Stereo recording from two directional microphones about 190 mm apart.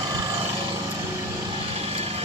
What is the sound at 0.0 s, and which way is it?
Vehicle, 20° right (ahead or behind).